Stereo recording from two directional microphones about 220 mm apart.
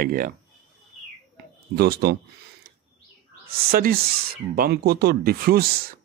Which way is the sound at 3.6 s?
45° right (ahead or behind).